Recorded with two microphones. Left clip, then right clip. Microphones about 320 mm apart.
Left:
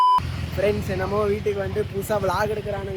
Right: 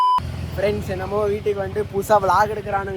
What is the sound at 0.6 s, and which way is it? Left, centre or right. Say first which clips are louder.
Speech: right 1 dB; centre.